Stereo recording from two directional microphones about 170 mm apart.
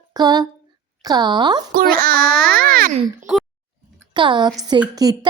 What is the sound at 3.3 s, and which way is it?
Speech, 5° right (ahead or behind).